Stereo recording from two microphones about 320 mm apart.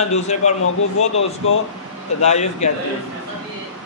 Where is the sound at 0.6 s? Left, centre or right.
Left.